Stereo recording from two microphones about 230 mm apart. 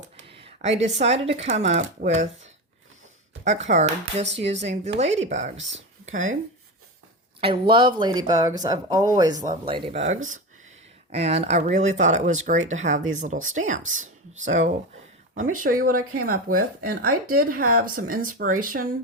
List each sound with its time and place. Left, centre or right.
0.3 s a sound: right
0.8 s speech: right
7.4 s speech: right
9.3 s speech: right